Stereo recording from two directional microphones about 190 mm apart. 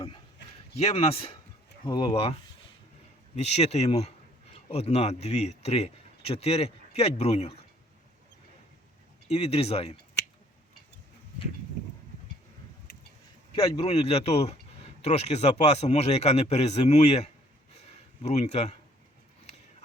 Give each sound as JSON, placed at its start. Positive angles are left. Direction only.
{"t": 0.8, "sound": "speech", "side_deg": 30}
{"t": 9.3, "sound": "speech", "side_deg": 30}
{"t": 13.5, "sound": "speech", "side_deg": 30}